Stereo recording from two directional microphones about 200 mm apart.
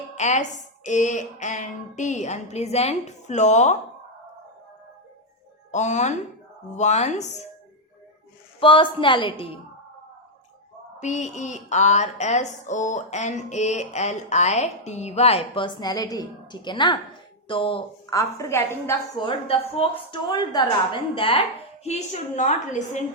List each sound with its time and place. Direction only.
0.2 s a woman's voice: 35° left (ahead or behind)
5.7 s a woman's voice: 35° left (ahead or behind)
8.6 s a woman's voice: 25° left (ahead or behind)
11.0 s a woman's voice: 35° left (ahead or behind); by 18.9 s 15° left (ahead or behind)
19.2 s a woman's voice: 25° left (ahead or behind)